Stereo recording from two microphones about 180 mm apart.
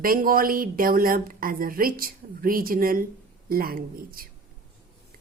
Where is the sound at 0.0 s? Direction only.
50° right (ahead or behind).